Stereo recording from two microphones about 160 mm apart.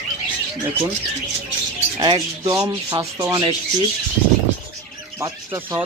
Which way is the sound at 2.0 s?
20° right (ahead or behind).